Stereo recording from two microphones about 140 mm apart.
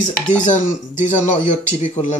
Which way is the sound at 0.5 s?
60° left (ahead or behind).